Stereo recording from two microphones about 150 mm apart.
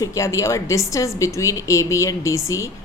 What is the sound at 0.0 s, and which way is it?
A woman's voice, 20° left (ahead or behind).